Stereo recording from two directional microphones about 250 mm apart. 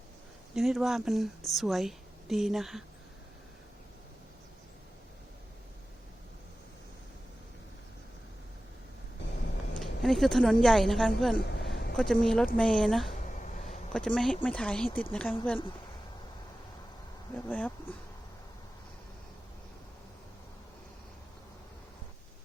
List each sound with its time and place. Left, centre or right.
0.5 s speech: centre
9.8 s speech: centre
11.4 s a sound: left
11.9 s speech: centre
17.3 s speech: centre